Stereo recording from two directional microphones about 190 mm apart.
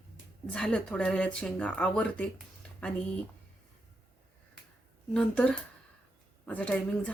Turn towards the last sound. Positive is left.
turn(degrees=5)  # may be behind; listen again after turning